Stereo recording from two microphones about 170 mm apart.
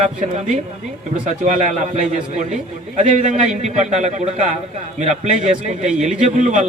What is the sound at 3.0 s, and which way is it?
A man's voice, 45° right (ahead or behind).